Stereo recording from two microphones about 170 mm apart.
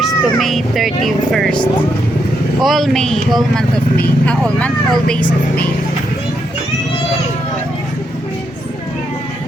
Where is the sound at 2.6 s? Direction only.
Centre (ahead or behind).